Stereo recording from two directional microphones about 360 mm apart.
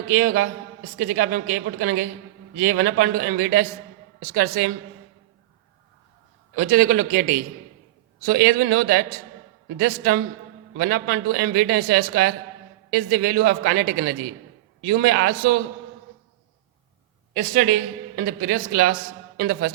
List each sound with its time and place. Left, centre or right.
0.1 s a man's voice: right
6.6 s a man's voice: right
17.3 s a man's voice: right